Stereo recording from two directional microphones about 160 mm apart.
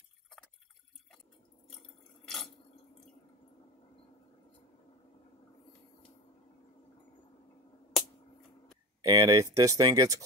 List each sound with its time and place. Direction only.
9.0 s speech: 20° right (ahead or behind)